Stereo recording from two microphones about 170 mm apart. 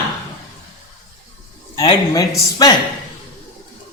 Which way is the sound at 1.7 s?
25° left (ahead or behind).